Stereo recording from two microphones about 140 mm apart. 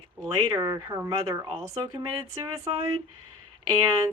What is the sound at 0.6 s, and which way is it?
Speech, 25° right (ahead or behind).